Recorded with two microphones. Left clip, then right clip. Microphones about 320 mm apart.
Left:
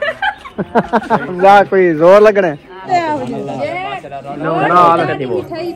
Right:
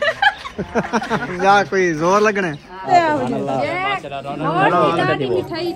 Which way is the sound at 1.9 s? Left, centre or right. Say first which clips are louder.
Left 11 dB; left.